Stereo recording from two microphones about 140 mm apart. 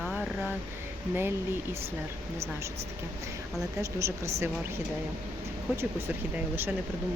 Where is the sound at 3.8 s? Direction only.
20° right (ahead or behind).